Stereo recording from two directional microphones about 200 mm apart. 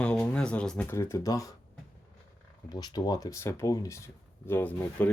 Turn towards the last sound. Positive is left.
turn(degrees=10)  # may be behind; listen again after turning